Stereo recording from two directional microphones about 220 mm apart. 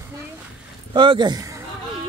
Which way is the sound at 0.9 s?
20° right (ahead or behind).